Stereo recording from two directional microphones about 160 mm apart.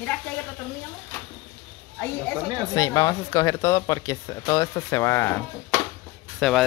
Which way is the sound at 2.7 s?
20° left (ahead or behind).